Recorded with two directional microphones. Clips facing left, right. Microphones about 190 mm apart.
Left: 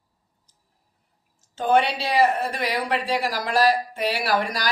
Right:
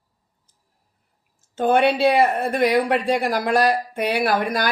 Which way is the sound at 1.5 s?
55° right (ahead or behind).